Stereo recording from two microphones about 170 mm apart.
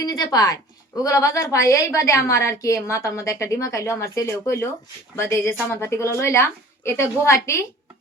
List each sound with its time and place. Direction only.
0.0 s a woman's voice: 25° left (ahead or behind)